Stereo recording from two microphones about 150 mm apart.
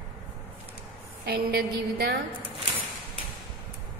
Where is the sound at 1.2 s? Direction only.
90° right.